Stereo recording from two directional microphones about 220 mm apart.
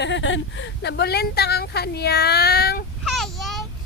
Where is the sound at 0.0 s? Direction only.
55° left (ahead or behind).